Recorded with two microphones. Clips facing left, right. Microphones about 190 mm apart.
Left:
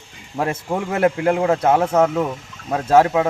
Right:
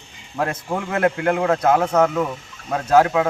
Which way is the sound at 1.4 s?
25° left (ahead or behind).